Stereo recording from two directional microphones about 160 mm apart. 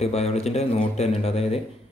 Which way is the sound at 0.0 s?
40° left (ahead or behind).